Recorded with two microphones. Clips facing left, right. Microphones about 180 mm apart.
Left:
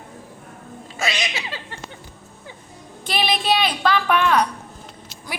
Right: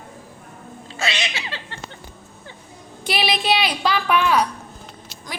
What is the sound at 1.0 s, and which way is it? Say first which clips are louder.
Speech: left 1 dB; 25° right (ahead or behind).